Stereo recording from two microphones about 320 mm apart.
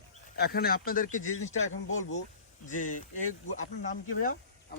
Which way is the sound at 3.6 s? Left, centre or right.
Left.